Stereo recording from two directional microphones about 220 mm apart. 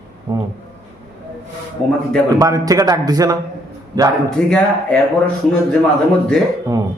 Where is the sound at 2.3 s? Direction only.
15° right (ahead or behind).